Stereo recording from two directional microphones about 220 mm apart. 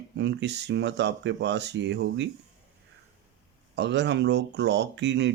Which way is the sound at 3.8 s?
50° right (ahead or behind).